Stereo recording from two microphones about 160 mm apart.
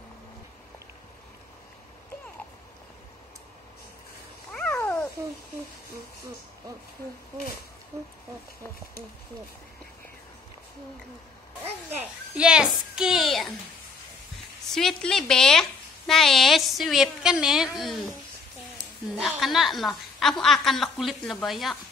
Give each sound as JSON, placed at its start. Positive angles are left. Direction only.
{"t": 4.5, "sound": "cat", "side_deg": 5}
{"t": 12.0, "sound": "a sound", "side_deg": -5}
{"t": 14.7, "sound": "a woman's voice", "side_deg": 0}
{"t": 19.2, "sound": "a woman's voice", "side_deg": 0}